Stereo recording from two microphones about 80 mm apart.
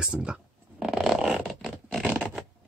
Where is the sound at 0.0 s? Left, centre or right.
Centre.